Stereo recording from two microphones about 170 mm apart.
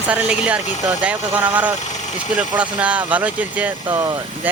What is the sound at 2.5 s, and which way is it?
A man's voice, 5° right (ahead or behind).